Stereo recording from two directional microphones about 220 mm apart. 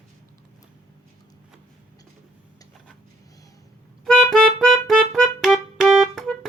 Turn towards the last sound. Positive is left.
turn(degrees=0)  # may be behind; listen again after turning